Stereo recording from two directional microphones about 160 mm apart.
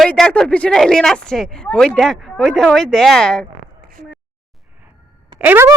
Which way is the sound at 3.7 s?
70° right (ahead or behind).